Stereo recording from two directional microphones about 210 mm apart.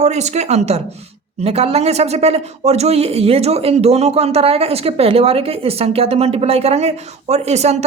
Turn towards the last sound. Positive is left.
turn(degrees=-30)  # may be behind; listen again after turning